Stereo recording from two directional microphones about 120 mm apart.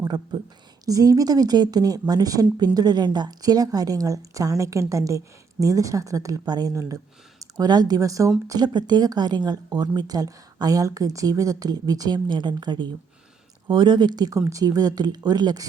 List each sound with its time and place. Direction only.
0.0 s speech: 35° right (ahead or behind)